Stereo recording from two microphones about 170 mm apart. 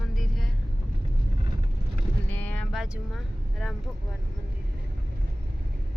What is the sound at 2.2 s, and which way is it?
Vehicle, 10° left (ahead or behind).